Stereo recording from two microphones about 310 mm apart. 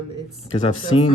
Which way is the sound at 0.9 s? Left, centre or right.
Centre.